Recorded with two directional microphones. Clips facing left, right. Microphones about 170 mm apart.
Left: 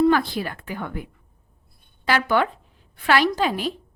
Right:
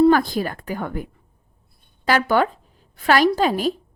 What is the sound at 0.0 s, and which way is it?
A woman's voice, 45° right (ahead or behind).